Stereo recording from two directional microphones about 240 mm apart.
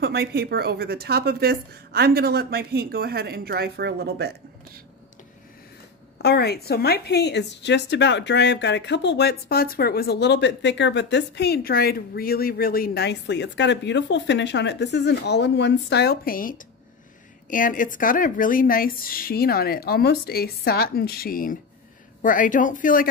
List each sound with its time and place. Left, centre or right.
0.0 s a woman's voice: right
6.1 s a woman's voice: left